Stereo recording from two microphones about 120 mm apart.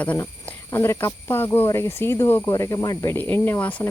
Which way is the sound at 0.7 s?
25° left (ahead or behind).